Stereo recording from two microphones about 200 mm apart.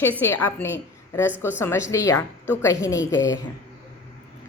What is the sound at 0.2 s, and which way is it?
A woman's voice, 10° left (ahead or behind).